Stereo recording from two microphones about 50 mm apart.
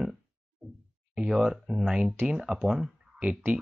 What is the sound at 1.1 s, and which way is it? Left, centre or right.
Speech, centre.